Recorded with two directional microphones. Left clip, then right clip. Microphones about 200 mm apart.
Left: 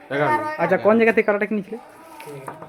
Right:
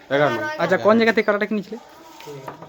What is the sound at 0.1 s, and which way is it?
Speech, 30° right (ahead or behind).